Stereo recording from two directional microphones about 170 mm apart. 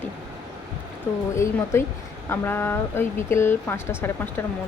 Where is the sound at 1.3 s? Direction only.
15° left (ahead or behind).